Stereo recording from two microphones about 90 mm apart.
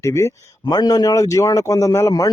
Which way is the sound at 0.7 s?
45° left (ahead or behind).